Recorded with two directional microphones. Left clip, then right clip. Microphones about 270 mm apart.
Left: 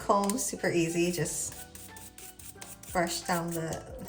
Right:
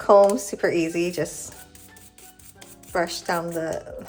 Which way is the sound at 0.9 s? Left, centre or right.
Centre.